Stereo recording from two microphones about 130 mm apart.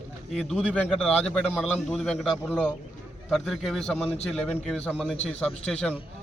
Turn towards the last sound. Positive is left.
turn(degrees=10)  # may be behind; listen again after turning